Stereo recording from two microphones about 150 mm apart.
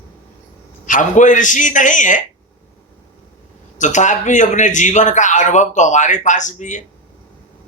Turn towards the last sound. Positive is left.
turn(degrees=55)  # may be behind; listen again after turning